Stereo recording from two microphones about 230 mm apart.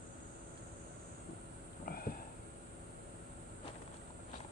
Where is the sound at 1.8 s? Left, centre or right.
Left.